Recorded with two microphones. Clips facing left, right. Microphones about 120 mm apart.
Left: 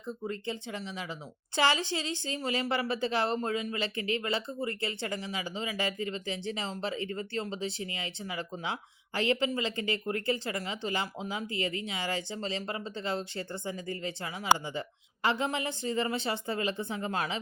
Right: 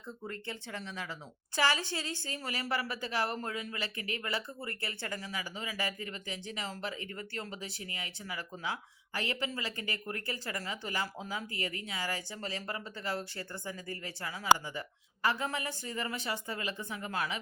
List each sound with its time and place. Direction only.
0.1 s speech: 15° left (ahead or behind)
1.5 s speech: 25° left (ahead or behind)